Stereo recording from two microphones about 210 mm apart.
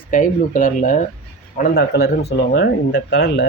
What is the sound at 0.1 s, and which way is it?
Speech, 40° left (ahead or behind).